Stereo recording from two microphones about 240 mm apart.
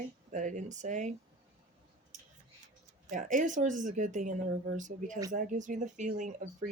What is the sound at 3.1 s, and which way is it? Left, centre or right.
A woman's voice, right.